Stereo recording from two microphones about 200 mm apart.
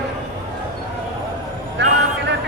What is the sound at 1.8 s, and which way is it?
Speech, 60° right (ahead or behind).